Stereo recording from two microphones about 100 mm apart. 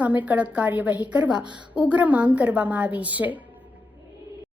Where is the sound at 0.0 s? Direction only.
15° right (ahead or behind).